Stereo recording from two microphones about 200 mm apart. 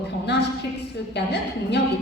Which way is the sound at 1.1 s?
60° left (ahead or behind).